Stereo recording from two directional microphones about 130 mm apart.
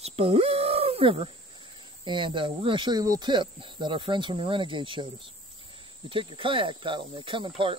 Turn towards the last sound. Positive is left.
turn(degrees=-40)  # may be behind; listen again after turning